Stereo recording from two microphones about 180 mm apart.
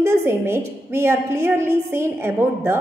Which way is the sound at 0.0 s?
15° right (ahead or behind).